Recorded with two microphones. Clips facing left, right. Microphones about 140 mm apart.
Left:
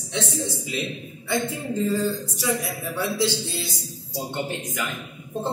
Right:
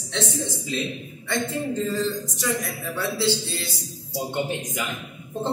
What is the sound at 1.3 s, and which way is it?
A man's voice, 10° left (ahead or behind).